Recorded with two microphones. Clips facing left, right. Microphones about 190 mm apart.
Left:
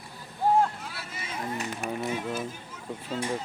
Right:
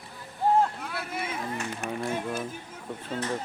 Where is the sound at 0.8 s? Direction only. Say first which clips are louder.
Right 6 dB; 55° right (ahead or behind).